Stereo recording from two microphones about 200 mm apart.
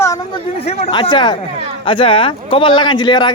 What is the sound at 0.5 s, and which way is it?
Speech, 30° left (ahead or behind).